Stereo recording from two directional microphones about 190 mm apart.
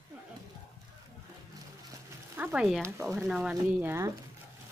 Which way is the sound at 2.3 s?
5° right (ahead or behind).